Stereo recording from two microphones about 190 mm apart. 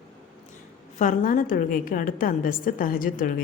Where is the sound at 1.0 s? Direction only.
45° left (ahead or behind).